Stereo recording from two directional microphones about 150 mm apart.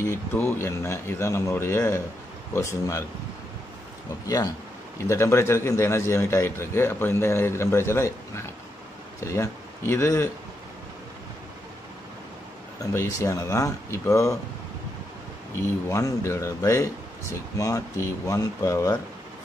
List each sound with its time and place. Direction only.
0.0 s a man's voice: 15° left (ahead or behind)
4.9 s a man's voice: 20° left (ahead or behind)
12.8 s speech: 20° left (ahead or behind)
15.9 s speech: 20° left (ahead or behind)